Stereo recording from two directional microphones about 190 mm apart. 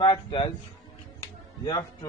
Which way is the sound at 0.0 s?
20° left (ahead or behind).